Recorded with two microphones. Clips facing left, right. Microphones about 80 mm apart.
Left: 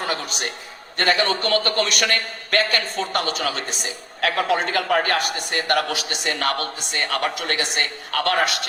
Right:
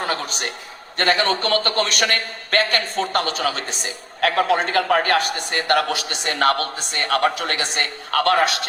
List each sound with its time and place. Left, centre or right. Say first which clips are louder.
0.1 s a woman's voice: right 1 dB; right